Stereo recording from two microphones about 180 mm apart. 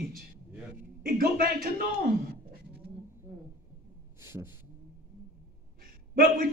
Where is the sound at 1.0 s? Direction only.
55° right (ahead or behind).